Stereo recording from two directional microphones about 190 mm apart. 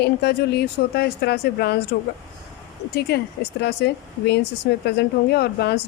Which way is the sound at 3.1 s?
60° left (ahead or behind).